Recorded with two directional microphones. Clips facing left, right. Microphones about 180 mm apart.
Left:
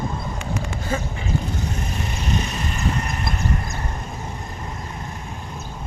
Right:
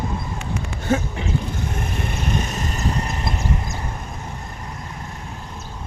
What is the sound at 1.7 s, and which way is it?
Vehicle, 55° right (ahead or behind).